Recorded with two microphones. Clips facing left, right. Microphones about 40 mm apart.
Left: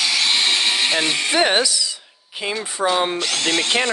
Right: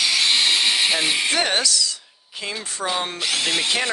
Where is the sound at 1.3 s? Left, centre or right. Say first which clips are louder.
Left 4 dB; centre.